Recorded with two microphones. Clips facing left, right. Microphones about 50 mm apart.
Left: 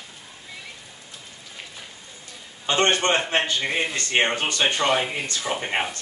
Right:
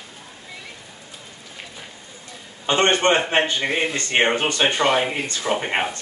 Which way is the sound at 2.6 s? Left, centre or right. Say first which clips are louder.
Right 3 dB; centre.